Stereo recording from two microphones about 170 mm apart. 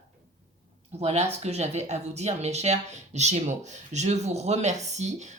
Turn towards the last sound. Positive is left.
turn(degrees=-45)  # may be behind; listen again after turning